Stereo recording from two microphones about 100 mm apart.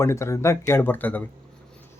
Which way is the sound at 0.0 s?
30° left (ahead or behind).